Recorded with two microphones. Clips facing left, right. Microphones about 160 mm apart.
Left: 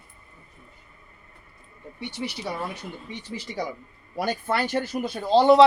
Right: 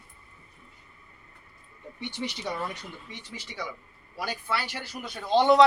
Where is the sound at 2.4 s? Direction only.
10° left (ahead or behind).